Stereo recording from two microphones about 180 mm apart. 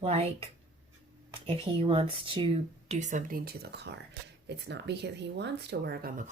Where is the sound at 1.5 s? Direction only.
30° right (ahead or behind).